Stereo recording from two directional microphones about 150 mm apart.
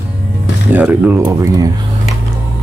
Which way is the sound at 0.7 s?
10° right (ahead or behind).